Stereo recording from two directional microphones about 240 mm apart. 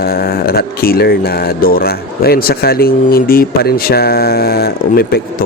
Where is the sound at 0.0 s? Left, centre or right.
Left.